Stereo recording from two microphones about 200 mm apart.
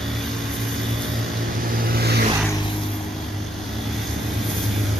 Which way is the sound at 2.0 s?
50° right (ahead or behind).